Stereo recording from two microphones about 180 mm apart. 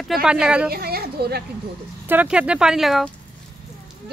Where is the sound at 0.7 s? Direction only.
60° right (ahead or behind).